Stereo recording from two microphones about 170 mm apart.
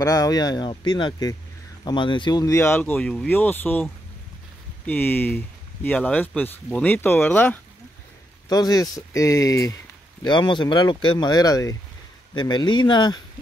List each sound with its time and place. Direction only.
0.0 s speech: 20° left (ahead or behind)
8.5 s speech: 20° left (ahead or behind)